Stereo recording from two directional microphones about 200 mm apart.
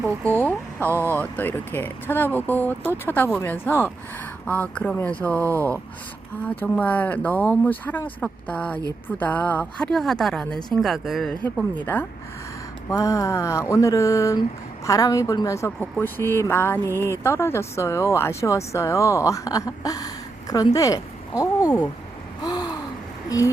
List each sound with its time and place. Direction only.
0.0 s speech: 10° left (ahead or behind)
0.9 s speech: 10° right (ahead or behind)
1.1 s speech: 10° left (ahead or behind)
6.6 s a woman's voice: 10° left (ahead or behind)
22.4 s gasp: 20° left (ahead or behind)